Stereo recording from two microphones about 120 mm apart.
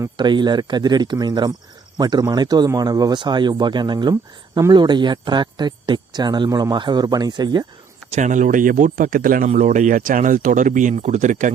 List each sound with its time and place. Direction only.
0.2 s speech: 40° right (ahead or behind)
8.1 s speech: 90° right